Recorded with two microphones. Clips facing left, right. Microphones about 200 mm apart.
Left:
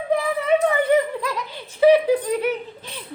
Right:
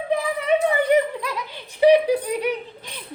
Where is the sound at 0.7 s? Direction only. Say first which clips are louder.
Even; 15° right (ahead or behind).